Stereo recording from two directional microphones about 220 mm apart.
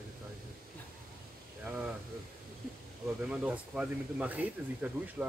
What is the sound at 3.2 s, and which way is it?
Speech, 5° right (ahead or behind).